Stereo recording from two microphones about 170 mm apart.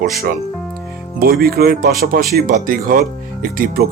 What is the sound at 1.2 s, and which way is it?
Speech, 65° right (ahead or behind).